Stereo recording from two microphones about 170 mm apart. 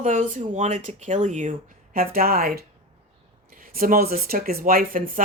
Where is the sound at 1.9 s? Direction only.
60° right (ahead or behind).